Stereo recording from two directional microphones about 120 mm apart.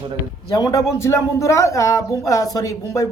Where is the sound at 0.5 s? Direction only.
30° left (ahead or behind).